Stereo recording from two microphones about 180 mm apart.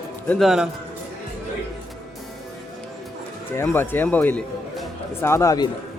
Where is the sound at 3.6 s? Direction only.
10° left (ahead or behind).